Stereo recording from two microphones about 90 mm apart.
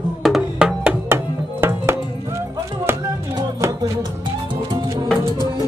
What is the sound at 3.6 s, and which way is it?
Music, 30° right (ahead or behind).